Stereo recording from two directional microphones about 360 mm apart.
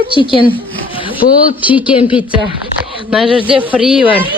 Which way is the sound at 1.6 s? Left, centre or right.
Centre.